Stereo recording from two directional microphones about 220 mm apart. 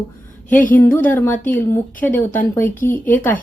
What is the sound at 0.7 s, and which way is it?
Speech, 10° left (ahead or behind).